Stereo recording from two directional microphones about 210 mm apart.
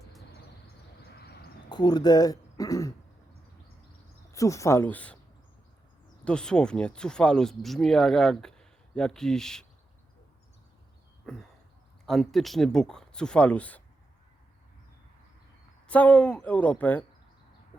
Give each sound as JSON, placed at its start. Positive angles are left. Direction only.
{"t": 1.1, "sound": "a sound", "side_deg": 50}
{"t": 1.7, "sound": "speech", "side_deg": 20}
{"t": 4.3, "sound": "speech", "side_deg": 15}
{"t": 6.2, "sound": "speech", "side_deg": 5}
{"t": 11.3, "sound": "speech", "side_deg": 0}
{"t": 15.9, "sound": "speech", "side_deg": 5}